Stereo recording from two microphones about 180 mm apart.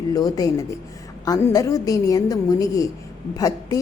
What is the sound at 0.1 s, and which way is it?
A woman's voice, 20° left (ahead or behind).